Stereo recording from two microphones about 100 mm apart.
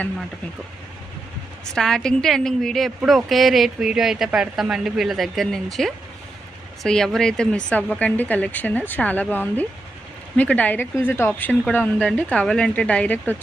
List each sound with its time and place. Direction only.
1.7 s speech: 5° left (ahead or behind)